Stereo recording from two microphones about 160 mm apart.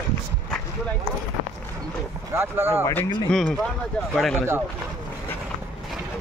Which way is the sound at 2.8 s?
15° left (ahead or behind).